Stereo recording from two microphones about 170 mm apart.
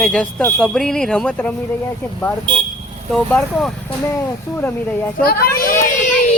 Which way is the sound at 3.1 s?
5° left (ahead or behind).